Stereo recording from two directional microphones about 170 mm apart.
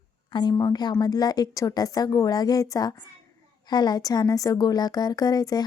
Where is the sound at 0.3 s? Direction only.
25° left (ahead or behind).